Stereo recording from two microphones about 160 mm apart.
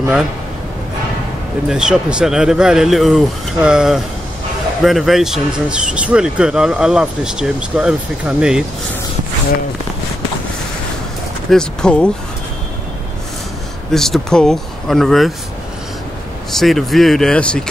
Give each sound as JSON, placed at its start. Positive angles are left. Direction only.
{"t": 1.7, "sound": "speech", "side_deg": -5}
{"t": 11.5, "sound": "speech", "side_deg": 5}
{"t": 13.9, "sound": "speech", "side_deg": 5}
{"t": 16.5, "sound": "speech", "side_deg": 0}